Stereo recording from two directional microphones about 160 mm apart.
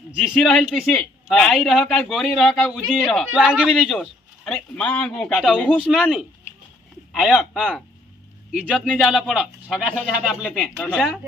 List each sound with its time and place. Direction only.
0.2 s a man's voice: centre (ahead or behind)
10.4 s speech: 10° left (ahead or behind)